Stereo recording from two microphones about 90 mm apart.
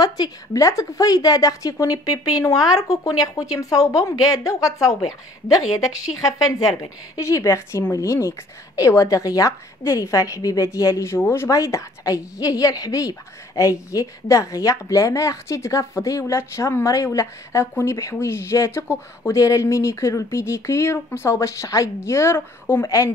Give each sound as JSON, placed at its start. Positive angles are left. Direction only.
{"t": 0.0, "sound": "a woman's voice", "side_deg": 45}